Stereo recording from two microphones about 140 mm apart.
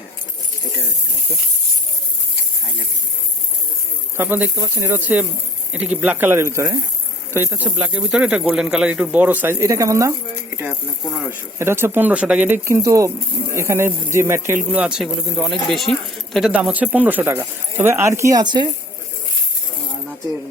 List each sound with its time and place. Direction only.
4.2 s speech: 15° right (ahead or behind)
12.6 s speech: 20° right (ahead or behind)
14.7 s speech: 5° right (ahead or behind)
16.5 s speech: 10° right (ahead or behind); by 18.7 s 30° right (ahead or behind)